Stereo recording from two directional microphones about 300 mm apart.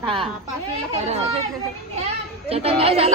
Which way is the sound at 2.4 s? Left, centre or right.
Centre.